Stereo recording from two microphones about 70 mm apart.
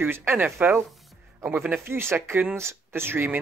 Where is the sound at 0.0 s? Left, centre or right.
Right.